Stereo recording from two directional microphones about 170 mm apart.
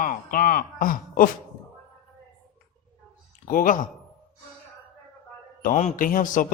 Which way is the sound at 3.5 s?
55° left (ahead or behind).